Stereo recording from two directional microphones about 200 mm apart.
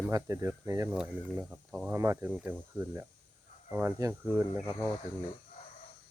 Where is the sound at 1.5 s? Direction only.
5° right (ahead or behind).